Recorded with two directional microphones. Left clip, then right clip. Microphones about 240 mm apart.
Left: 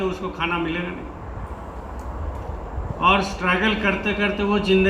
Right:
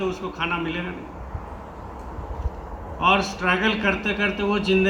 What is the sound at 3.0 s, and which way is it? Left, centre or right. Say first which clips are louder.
A man's voice: left 1 dB; right.